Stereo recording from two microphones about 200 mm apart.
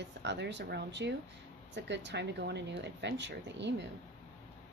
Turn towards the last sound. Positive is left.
turn(degrees=-60)  # may be behind; listen again after turning